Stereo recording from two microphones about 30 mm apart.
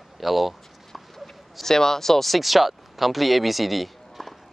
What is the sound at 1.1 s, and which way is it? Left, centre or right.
Speech, centre.